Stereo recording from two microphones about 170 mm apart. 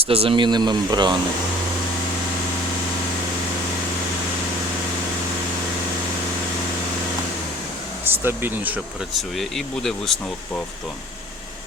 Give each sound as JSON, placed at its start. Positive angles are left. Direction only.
{"t": 0.1, "sound": "speech", "side_deg": -35}
{"t": 8.0, "sound": "speech", "side_deg": -15}
{"t": 9.1, "sound": "speech", "side_deg": 0}